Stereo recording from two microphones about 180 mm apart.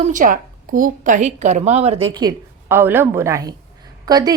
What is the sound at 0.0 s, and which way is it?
A woman's voice, 45° right (ahead or behind).